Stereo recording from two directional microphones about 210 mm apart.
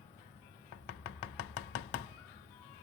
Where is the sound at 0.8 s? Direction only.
60° left (ahead or behind).